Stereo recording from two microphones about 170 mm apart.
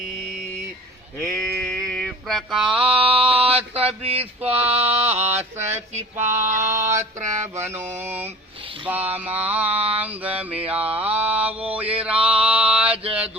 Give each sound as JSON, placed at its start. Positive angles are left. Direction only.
{"t": 1.2, "sound": "mantra", "side_deg": 10}
{"t": 3.0, "sound": "a sound", "side_deg": -35}
{"t": 3.6, "sound": "mantra", "side_deg": -10}
{"t": 4.0, "sound": "a sound", "side_deg": -35}
{"t": 4.4, "sound": "mantra", "side_deg": -10}
{"t": 11.9, "sound": "male singing", "side_deg": -5}